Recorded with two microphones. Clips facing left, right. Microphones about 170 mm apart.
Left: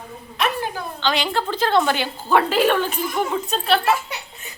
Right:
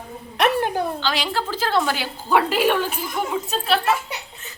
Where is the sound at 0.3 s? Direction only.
65° right (ahead or behind).